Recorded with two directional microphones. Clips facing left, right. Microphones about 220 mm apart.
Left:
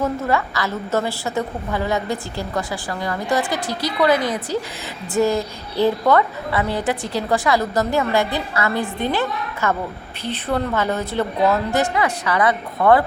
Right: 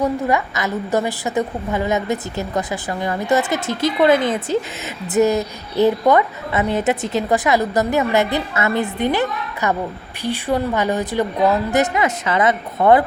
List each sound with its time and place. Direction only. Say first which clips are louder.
0.0 s a woman's voice: right 2 dB; 15° right (ahead or behind)